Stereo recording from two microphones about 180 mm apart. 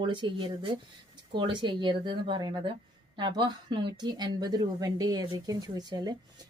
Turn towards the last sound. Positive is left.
turn(degrees=-20)  # may be behind; listen again after turning